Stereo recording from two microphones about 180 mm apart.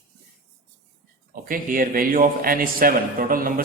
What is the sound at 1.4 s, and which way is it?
A man's voice, 50° right (ahead or behind).